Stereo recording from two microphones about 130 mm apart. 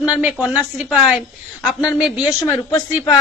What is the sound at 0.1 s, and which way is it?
A woman's voice, 10° right (ahead or behind).